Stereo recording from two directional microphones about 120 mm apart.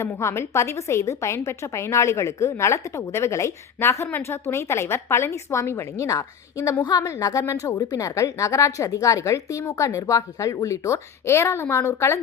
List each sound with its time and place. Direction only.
0.0 s a woman's voice: 25° left (ahead or behind)